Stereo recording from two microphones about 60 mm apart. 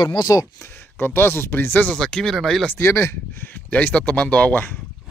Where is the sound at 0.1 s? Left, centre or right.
Left.